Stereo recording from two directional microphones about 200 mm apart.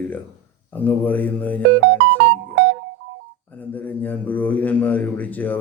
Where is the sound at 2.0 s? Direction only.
65° right (ahead or behind).